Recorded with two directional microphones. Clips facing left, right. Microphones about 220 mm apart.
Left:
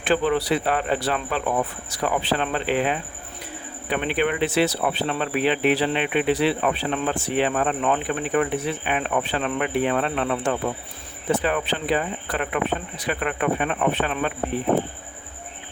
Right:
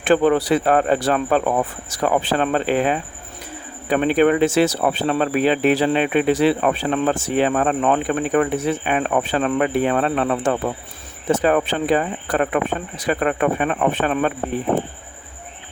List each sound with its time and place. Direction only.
0.0 s speech: 50° right (ahead or behind)